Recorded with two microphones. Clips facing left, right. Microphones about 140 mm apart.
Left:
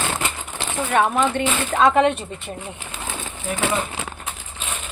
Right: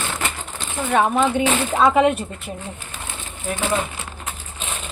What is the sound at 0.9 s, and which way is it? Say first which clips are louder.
Speech: right 1 dB; centre (ahead or behind).